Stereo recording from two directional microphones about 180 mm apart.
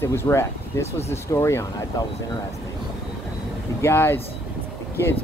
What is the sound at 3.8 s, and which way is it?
Speech, 15° left (ahead or behind).